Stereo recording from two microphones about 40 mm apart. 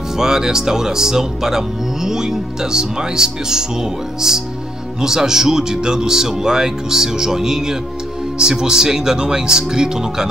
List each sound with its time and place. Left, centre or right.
0.2 s speech: centre